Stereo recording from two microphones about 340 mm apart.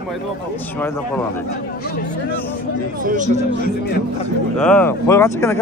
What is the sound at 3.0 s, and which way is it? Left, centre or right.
Speech, right.